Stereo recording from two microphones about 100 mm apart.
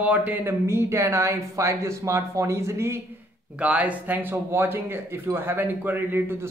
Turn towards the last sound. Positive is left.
turn(degrees=-20)  # may be behind; listen again after turning